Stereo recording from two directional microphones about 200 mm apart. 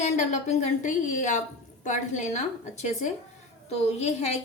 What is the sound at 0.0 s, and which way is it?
Speech, 35° left (ahead or behind).